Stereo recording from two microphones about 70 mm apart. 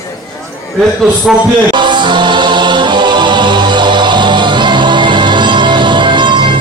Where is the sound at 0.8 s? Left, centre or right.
Centre.